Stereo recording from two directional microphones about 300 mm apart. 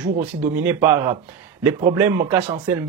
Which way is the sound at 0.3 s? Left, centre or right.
Centre.